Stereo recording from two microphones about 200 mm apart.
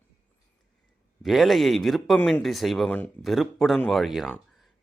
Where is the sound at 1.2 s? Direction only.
Centre (ahead or behind).